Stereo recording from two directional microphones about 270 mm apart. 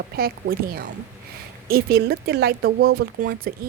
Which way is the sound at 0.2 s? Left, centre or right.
Right.